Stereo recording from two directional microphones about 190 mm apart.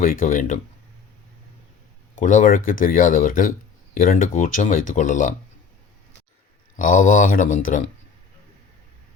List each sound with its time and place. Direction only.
0.0 s speech: 45° left (ahead or behind)
2.1 s speech: 45° left (ahead or behind)
6.7 s speech: 45° left (ahead or behind)